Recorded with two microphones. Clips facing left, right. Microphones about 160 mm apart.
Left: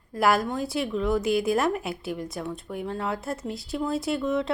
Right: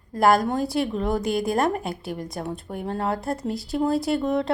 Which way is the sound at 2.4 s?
45° right (ahead or behind).